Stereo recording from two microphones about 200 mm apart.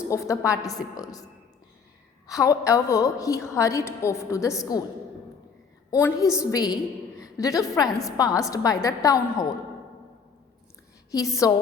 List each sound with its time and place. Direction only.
0.1 s a woman's voice: 15° left (ahead or behind)
2.2 s a woman's voice: 20° left (ahead or behind)
5.9 s a woman's voice: 15° left (ahead or behind)
11.1 s a woman's voice: 15° left (ahead or behind)